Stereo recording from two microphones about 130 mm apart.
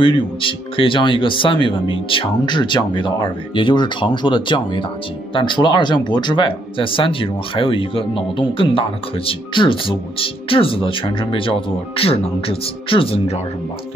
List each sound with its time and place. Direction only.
0.0 s speech: 40° left (ahead or behind)